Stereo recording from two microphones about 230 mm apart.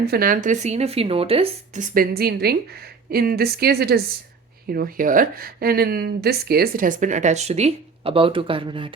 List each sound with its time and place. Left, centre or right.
0.0 s a woman's voice: right